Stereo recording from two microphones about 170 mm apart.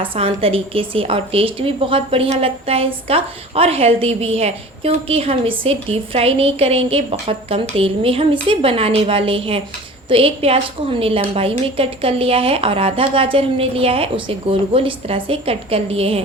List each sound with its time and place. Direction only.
0.0 s a woman's voice: 35° right (ahead or behind)